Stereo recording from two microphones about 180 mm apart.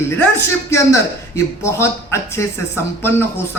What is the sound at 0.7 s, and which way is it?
Speech, 15° left (ahead or behind).